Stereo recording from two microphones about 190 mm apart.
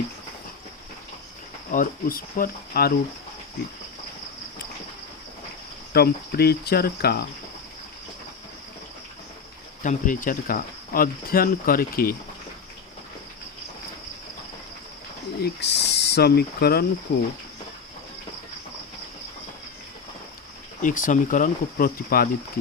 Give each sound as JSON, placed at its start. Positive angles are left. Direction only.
{"t": 1.7, "sound": "speech", "side_deg": 45}
{"t": 5.9, "sound": "cricket", "side_deg": 55}
{"t": 9.8, "sound": "speech", "side_deg": 45}
{"t": 15.4, "sound": "speech", "side_deg": 65}
{"t": 20.8, "sound": "speech", "side_deg": 45}